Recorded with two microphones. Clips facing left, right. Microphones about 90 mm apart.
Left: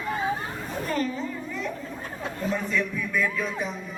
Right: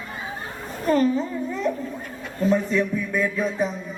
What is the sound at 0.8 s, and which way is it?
Speech, 35° right (ahead or behind).